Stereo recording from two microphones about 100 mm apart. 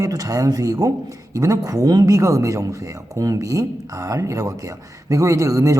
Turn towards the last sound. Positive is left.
turn(degrees=-35)  # may be behind; listen again after turning